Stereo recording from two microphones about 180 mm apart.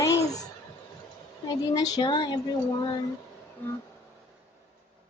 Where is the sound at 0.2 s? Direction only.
20° left (ahead or behind).